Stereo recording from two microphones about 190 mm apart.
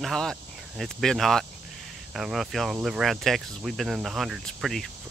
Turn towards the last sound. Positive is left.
turn(degrees=0)  # may be behind; listen again after turning